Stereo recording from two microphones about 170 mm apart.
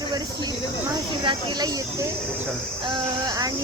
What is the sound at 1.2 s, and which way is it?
Speech, 30° right (ahead or behind).